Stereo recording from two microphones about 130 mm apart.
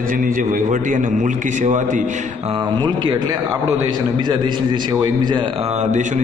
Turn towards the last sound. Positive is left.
turn(degrees=-65)  # may be behind; listen again after turning